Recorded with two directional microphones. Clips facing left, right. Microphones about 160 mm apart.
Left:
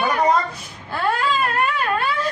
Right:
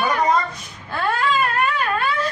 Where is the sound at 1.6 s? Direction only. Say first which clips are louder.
Even; centre (ahead or behind).